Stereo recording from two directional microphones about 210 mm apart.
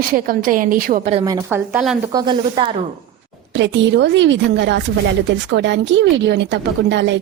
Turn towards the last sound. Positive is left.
turn(degrees=-55)  # may be behind; listen again after turning